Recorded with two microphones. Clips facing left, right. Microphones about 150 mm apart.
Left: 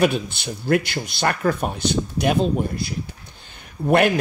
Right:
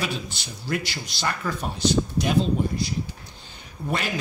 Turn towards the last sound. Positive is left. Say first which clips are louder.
# left 12 dB
turn(degrees=60)  # may be behind; listen again after turning